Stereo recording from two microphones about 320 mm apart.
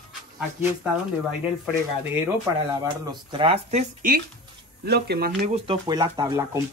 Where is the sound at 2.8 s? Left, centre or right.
Centre; by 5.6 s right.